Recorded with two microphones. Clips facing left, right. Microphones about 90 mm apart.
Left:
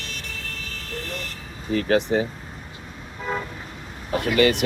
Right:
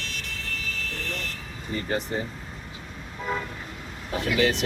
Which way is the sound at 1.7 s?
80° left.